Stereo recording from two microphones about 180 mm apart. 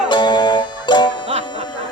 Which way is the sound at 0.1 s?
25° left (ahead or behind).